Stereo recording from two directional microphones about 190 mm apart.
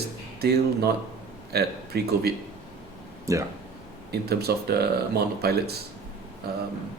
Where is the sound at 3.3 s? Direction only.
15° right (ahead or behind).